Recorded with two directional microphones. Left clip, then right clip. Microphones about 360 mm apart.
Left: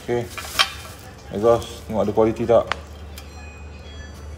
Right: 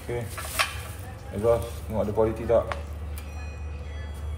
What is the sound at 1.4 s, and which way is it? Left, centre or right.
Speech, left.